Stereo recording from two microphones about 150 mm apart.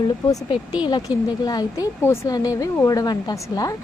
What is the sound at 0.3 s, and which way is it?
Speech, 30° left (ahead or behind).